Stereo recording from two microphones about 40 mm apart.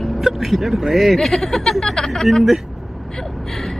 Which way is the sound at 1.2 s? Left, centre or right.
Centre.